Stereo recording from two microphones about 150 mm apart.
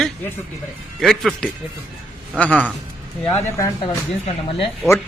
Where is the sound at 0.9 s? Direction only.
Centre (ahead or behind).